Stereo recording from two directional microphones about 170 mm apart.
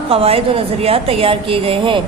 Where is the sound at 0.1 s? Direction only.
35° right (ahead or behind).